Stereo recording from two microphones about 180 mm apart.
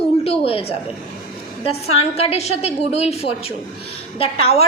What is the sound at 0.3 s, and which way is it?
A woman's voice, 30° left (ahead or behind).